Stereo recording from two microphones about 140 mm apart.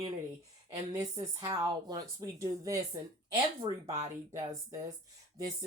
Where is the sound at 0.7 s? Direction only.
30° right (ahead or behind).